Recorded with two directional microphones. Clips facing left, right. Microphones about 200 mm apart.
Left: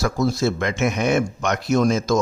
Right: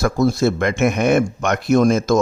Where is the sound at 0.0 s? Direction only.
55° right (ahead or behind).